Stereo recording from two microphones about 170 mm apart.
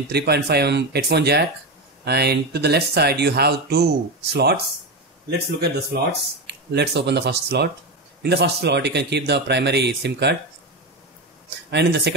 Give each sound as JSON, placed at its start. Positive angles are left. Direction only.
{"t": 0.1, "sound": "speech", "side_deg": -75}
{"t": 5.6, "sound": "speech", "side_deg": -75}
{"t": 11.7, "sound": "speech", "side_deg": -80}